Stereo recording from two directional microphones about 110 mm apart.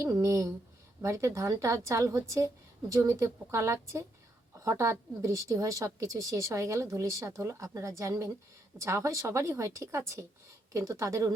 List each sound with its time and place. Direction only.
0.0 s a woman's voice: 25° right (ahead or behind)